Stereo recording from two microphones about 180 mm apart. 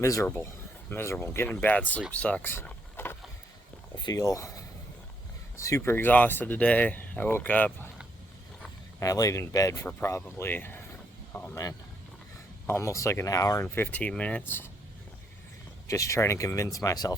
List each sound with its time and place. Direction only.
0.0 s speech: 15° left (ahead or behind)
2.1 s vehicle: 5° left (ahead or behind)
4.0 s speech: 20° left (ahead or behind)
9.0 s speech: 20° left (ahead or behind)
11.3 s vehicle: 10° left (ahead or behind)
12.6 s speech: 15° left (ahead or behind)
15.9 s speech: 15° left (ahead or behind)